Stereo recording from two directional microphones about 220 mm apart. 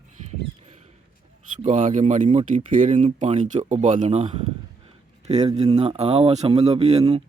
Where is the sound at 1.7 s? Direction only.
35° right (ahead or behind).